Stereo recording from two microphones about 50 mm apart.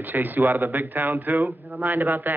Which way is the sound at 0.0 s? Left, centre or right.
Right.